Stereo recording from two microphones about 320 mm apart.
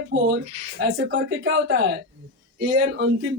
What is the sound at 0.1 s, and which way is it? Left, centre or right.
Speech, right.